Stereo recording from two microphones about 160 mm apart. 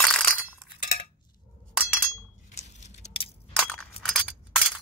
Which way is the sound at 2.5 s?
45° left (ahead or behind).